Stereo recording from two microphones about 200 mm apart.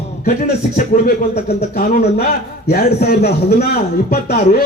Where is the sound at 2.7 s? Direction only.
50° left (ahead or behind).